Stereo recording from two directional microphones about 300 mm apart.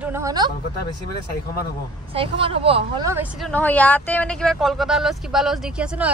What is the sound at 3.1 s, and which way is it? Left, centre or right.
A woman's voice, centre.